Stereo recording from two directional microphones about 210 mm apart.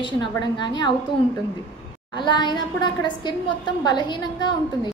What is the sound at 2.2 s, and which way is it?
Speech, 20° left (ahead or behind).